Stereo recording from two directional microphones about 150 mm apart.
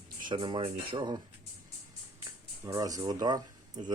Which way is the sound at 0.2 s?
30° right (ahead or behind).